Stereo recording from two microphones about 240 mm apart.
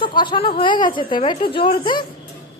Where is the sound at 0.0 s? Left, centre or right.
Centre.